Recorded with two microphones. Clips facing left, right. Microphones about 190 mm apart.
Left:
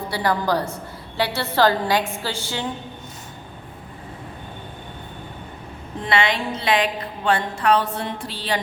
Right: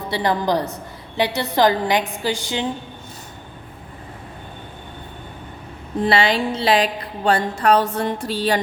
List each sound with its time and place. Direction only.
0.1 s a woman's voice: 20° right (ahead or behind)
6.0 s music: 35° right (ahead or behind)